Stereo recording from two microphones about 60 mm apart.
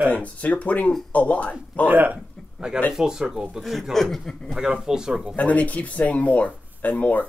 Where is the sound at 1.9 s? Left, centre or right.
Right.